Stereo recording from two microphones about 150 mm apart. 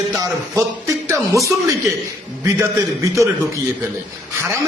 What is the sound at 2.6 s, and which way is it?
A man's voice, 20° right (ahead or behind).